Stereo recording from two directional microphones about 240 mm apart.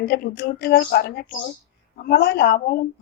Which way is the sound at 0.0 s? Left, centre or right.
Left.